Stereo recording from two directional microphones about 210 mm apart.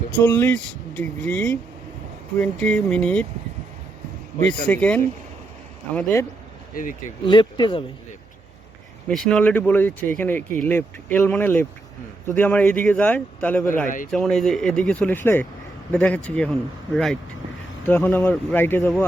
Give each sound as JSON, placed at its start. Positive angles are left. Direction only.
{"t": 0.2, "sound": "speech", "side_deg": 10}
{"t": 4.6, "sound": "speech", "side_deg": 5}
{"t": 7.3, "sound": "speech", "side_deg": 20}
{"t": 9.0, "sound": "speech", "side_deg": 0}
{"t": 13.8, "sound": "a man's voice", "side_deg": 40}
{"t": 14.1, "sound": "speech", "side_deg": 0}